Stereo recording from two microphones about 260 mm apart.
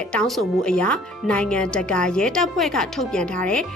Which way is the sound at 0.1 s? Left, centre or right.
Centre.